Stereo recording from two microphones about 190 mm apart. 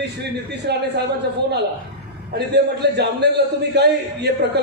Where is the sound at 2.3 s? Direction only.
60° right (ahead or behind).